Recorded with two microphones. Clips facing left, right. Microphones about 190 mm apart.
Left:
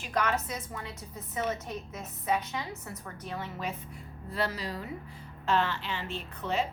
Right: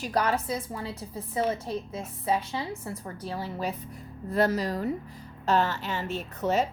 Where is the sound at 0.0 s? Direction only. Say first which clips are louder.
Right 3 dB; 35° right (ahead or behind).